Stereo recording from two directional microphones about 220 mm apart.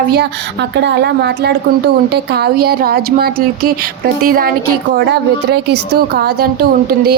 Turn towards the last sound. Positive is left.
turn(degrees=-45)  # may be behind; listen again after turning